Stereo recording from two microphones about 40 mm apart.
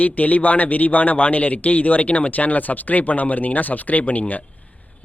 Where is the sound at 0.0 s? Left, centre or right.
Left.